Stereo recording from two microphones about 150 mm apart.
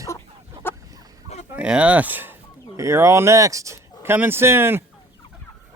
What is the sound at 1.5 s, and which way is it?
Speech, 10° right (ahead or behind).